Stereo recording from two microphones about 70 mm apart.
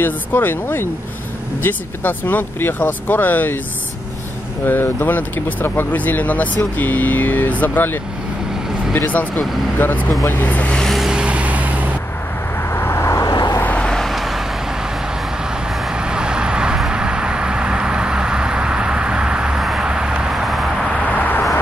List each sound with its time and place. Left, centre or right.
0.0 s speech: left
4.6 s speech: left
10.8 s vehicle: centre
11.1 s vehicle: centre
12.6 s vehicle: left
13.2 s vehicle: left
13.6 s vehicle: left
13.8 s vehicle: centre
15.8 s vehicle: centre
21.1 s a sound: left